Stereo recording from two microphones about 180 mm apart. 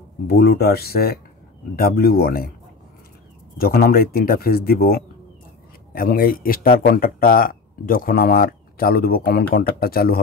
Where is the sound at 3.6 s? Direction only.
55° left (ahead or behind).